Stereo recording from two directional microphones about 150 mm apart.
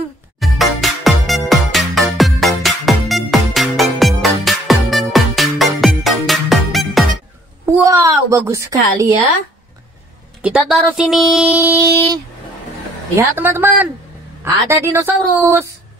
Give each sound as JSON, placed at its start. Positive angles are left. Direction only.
{"t": 0.4, "sound": "music", "side_deg": 0}
{"t": 7.6, "sound": "a sound", "side_deg": -20}
{"t": 10.4, "sound": "a woman's voice", "side_deg": -10}
{"t": 13.1, "sound": "a woman's voice", "side_deg": -15}